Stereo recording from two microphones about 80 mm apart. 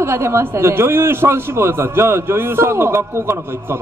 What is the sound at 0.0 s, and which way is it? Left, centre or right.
A man's voice, right.